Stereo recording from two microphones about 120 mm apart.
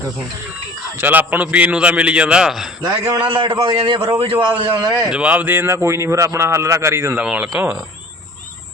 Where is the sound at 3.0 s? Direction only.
35° right (ahead or behind).